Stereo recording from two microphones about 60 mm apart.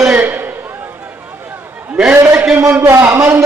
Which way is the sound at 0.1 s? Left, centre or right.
Right.